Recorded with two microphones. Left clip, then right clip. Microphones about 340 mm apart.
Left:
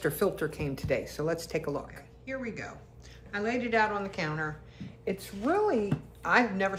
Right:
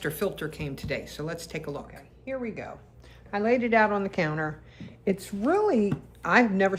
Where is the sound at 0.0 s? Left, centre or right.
Centre.